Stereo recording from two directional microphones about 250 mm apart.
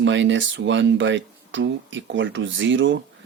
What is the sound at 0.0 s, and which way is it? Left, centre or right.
Speech, right.